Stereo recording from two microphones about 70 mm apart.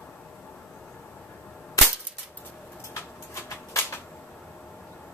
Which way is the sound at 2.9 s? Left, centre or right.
Left.